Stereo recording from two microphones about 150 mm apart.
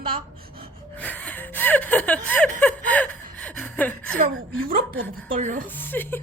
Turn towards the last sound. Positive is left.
turn(degrees=15)  # may be behind; listen again after turning